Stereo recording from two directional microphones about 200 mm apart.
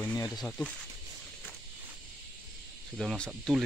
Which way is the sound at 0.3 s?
Centre (ahead or behind).